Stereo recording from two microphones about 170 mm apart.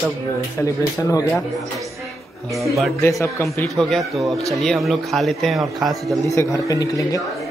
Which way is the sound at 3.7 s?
Centre (ahead or behind).